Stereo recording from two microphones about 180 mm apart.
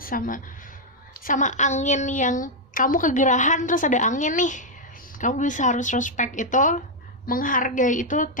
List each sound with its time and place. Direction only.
0.0 s a woman's voice: 50° left (ahead or behind)